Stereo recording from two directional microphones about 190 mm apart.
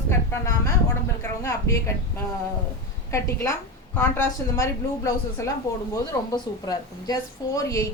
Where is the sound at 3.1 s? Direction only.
15° left (ahead or behind).